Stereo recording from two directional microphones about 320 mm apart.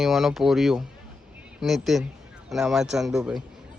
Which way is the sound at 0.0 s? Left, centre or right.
Centre.